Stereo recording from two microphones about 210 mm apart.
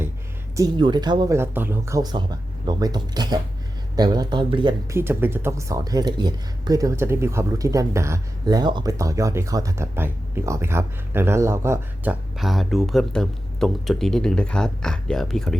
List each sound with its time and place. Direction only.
0.5 s speech: 20° right (ahead or behind)
12.4 s speech: centre (ahead or behind)